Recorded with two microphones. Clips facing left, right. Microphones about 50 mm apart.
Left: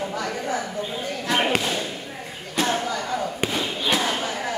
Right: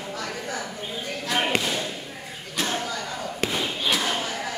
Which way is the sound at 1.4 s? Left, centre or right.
Centre.